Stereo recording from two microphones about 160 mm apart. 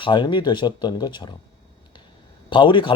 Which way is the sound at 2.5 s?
30° left (ahead or behind).